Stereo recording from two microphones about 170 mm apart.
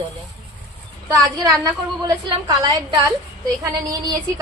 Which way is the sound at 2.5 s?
25° right (ahead or behind).